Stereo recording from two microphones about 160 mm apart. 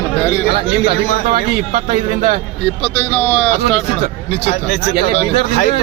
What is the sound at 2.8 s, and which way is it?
Speech, 10° left (ahead or behind).